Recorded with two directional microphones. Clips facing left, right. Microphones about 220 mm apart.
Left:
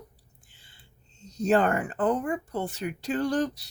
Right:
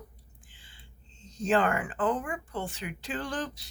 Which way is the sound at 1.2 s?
40° left (ahead or behind).